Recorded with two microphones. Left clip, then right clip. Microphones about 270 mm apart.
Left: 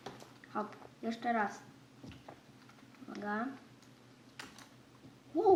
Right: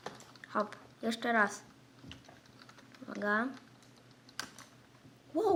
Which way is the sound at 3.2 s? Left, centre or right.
Right.